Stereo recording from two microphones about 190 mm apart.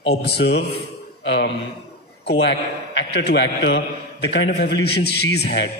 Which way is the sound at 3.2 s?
70° left (ahead or behind).